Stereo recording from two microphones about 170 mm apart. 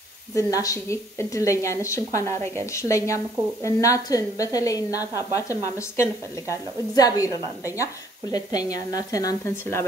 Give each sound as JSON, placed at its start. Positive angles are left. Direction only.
{"t": 0.3, "sound": "a woman's voice", "side_deg": 20}